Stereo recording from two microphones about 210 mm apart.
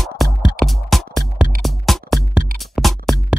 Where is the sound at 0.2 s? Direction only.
Centre (ahead or behind).